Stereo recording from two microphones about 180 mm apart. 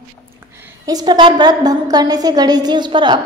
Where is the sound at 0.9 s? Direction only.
25° right (ahead or behind).